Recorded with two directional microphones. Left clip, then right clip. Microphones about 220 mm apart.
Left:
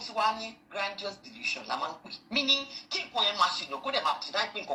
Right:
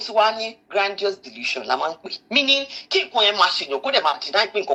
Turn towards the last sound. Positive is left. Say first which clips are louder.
# right 11 dB
turn(degrees=-30)  # may be behind; listen again after turning